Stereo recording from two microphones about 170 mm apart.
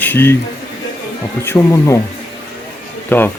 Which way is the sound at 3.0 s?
10° left (ahead or behind).